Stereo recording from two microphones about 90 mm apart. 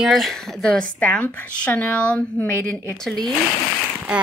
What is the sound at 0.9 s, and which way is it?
A woman's voice, 15° left (ahead or behind).